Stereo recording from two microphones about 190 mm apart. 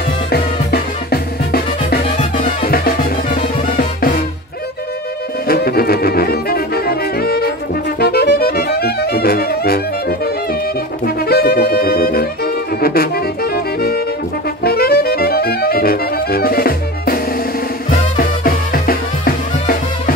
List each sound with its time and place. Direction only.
0.3 s music: 55° left (ahead or behind)
5.5 s brass instrument: 55° left (ahead or behind)
8.0 s music: 55° left (ahead or behind)